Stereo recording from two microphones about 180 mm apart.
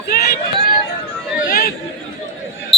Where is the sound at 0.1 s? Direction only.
55° left (ahead or behind).